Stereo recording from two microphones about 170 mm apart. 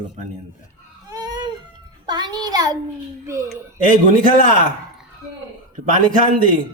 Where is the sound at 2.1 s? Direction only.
25° right (ahead or behind).